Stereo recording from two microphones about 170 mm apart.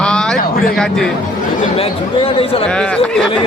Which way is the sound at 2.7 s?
5° left (ahead or behind).